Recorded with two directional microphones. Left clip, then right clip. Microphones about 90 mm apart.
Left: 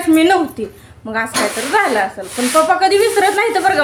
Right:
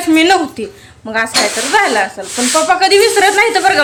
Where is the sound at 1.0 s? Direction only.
10° right (ahead or behind).